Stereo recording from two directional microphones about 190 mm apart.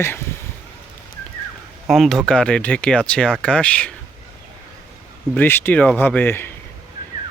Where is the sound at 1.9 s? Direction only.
Centre (ahead or behind).